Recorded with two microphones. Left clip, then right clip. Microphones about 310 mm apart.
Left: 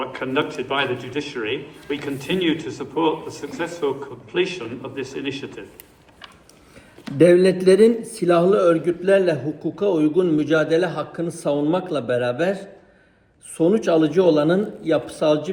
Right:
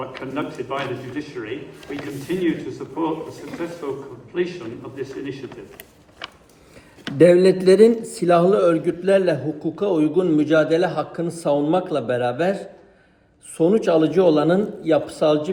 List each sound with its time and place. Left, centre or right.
0.0 s a man's voice: left
2.7 s a man's voice: left
7.2 s a man's voice: centre